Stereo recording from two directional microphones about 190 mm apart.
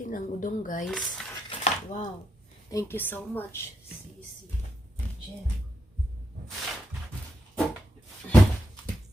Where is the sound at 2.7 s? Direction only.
15° left (ahead or behind).